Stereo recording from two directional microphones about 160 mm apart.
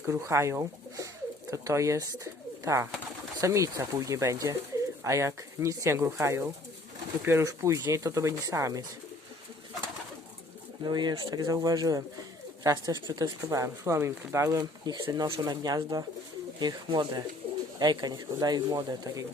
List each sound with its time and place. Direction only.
0.0 s speech: 15° right (ahead or behind)
10.8 s speech: 25° right (ahead or behind)